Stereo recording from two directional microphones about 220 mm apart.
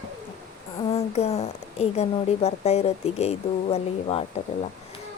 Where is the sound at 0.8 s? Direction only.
25° left (ahead or behind).